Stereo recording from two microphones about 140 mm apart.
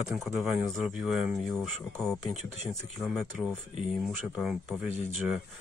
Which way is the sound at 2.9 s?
Centre (ahead or behind).